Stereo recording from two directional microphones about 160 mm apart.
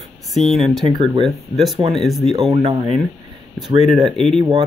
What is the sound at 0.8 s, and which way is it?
Speech, 35° right (ahead or behind).